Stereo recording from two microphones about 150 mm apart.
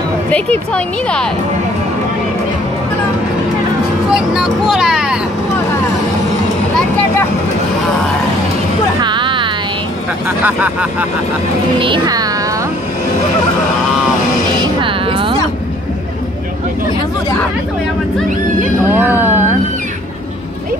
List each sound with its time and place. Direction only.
0.3 s speech: 10° left (ahead or behind)
4.1 s vehicle: 5° right (ahead or behind)
9.0 s music: 30° right (ahead or behind)
10.2 s speech: 10° right (ahead or behind)
11.8 s music: 30° right (ahead or behind)
14.6 s music: 35° right (ahead or behind)
18.9 s speech: 15° right (ahead or behind)